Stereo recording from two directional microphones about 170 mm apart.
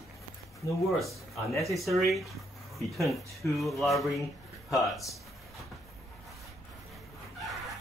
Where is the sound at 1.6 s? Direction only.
Centre (ahead or behind).